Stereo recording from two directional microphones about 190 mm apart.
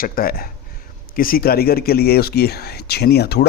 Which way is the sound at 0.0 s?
50° left (ahead or behind).